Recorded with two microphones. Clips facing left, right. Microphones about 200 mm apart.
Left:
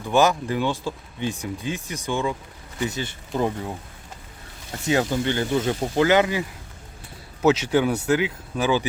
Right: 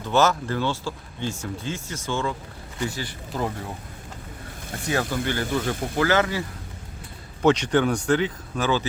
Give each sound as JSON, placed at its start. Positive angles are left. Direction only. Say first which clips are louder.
{"t": 0.0, "sound": "speech", "louder": "left 2 dB", "side_deg": 15}
{"t": 4.9, "sound": "speech", "louder": "left 4 dB", "side_deg": 20}
{"t": 7.4, "sound": "speech", "louder": "even", "side_deg": 5}